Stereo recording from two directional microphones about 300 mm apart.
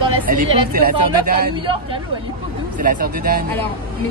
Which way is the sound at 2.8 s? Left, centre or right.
Right.